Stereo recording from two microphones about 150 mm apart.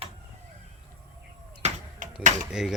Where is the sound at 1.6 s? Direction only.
45° right (ahead or behind).